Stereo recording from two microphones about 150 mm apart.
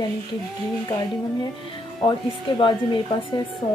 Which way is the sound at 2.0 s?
30° left (ahead or behind).